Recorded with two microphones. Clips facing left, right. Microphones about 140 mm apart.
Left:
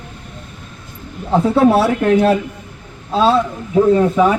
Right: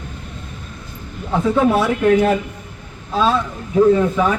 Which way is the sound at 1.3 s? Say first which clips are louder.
Left 4 dB; 30° left (ahead or behind).